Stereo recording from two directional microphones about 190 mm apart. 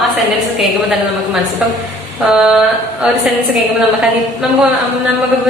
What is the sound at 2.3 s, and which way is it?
Speech, centre (ahead or behind).